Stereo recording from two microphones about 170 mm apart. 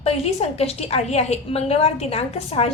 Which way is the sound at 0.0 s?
35° left (ahead or behind).